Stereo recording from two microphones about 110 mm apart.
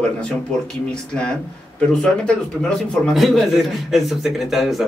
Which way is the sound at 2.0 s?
5° left (ahead or behind).